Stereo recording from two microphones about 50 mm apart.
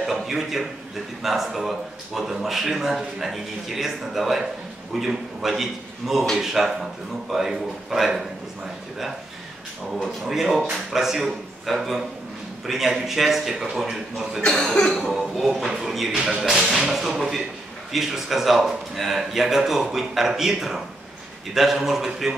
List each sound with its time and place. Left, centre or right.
0.0 s a man's voice: centre
10.2 s a man's voice: centre
14.5 s cough: centre
15.0 s a man's voice: centre